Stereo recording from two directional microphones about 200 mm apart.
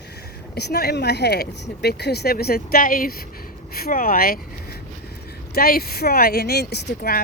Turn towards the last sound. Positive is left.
turn(degrees=55)  # may be behind; listen again after turning